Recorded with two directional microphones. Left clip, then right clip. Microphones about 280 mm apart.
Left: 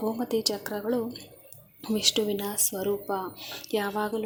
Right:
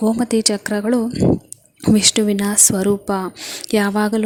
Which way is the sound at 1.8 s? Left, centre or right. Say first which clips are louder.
Right 10 dB; right.